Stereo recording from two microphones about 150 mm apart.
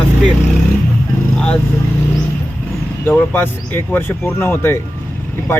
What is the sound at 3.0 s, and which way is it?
Speech, 10° left (ahead or behind).